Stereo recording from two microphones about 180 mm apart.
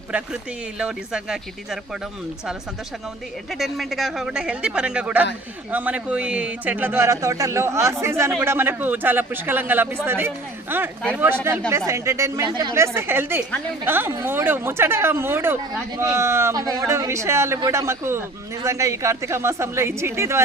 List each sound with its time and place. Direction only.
0.8 s speech: 5° right (ahead or behind)
3.5 s speech: centre (ahead or behind)